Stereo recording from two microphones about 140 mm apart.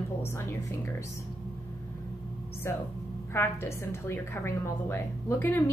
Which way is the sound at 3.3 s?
20° left (ahead or behind).